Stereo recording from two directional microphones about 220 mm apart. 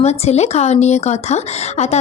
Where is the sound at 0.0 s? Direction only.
30° left (ahead or behind).